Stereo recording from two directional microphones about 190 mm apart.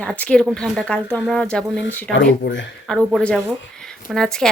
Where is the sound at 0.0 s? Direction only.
5° left (ahead or behind).